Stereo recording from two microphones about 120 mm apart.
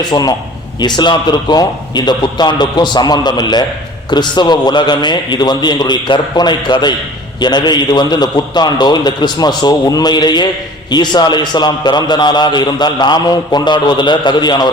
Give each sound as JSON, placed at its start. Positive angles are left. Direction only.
{"t": 0.1, "sound": "a man's voice", "side_deg": 30}